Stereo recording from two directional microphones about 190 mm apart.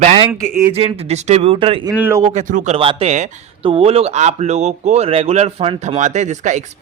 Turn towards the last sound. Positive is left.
turn(degrees=-40)  # may be behind; listen again after turning